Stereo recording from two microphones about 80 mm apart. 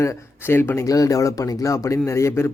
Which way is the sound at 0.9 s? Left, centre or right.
Left.